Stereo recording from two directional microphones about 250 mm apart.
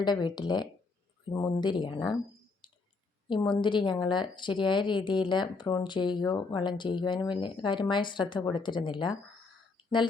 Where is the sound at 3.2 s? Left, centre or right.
Centre.